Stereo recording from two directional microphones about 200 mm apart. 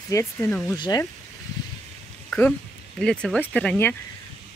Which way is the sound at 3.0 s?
5° left (ahead or behind).